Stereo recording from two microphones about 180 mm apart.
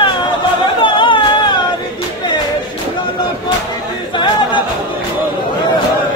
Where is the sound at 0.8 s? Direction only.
25° left (ahead or behind).